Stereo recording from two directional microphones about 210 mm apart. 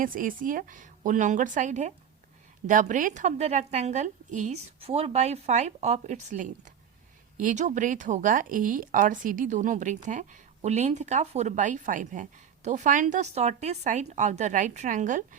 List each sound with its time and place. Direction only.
0.0 s speech: 40° right (ahead or behind)